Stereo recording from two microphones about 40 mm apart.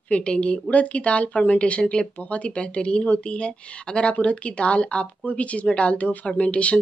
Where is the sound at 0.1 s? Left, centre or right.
Left.